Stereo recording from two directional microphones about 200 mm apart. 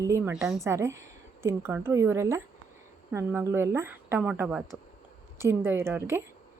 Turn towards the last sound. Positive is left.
turn(degrees=-10)  # may be behind; listen again after turning